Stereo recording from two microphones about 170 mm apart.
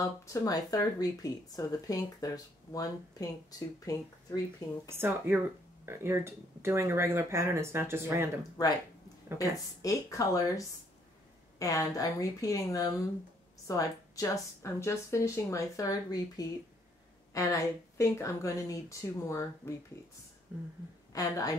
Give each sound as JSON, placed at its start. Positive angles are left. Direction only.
{"t": 0.0, "sound": "speech", "side_deg": 20}
{"t": 4.9, "sound": "speech", "side_deg": -15}
{"t": 9.8, "sound": "speech", "side_deg": 20}
{"t": 21.1, "sound": "speech", "side_deg": 20}